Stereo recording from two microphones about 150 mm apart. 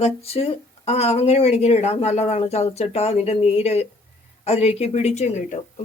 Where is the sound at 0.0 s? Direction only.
40° left (ahead or behind).